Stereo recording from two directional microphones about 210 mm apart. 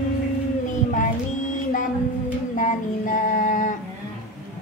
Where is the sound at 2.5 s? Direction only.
40° left (ahead or behind).